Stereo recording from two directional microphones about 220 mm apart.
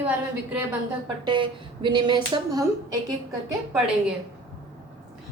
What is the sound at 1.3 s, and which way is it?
Speech, 20° right (ahead or behind).